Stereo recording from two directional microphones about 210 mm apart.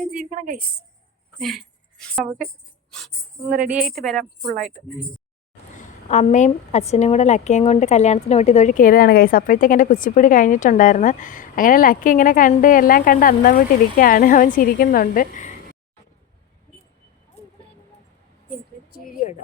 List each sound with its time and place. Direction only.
0.1 s a woman's voice: 40° right (ahead or behind)
1.4 s a woman's voice: centre (ahead or behind)
3.7 s speech: 5° right (ahead or behind)
5.7 s a woman's voice: 35° left (ahead or behind)
18.9 s a sound: 40° left (ahead or behind)